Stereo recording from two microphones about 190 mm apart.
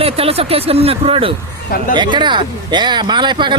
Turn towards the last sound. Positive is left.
turn(degrees=-25)  # may be behind; listen again after turning